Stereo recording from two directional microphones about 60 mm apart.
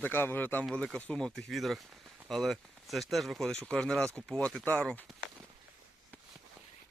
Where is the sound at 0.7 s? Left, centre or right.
Centre.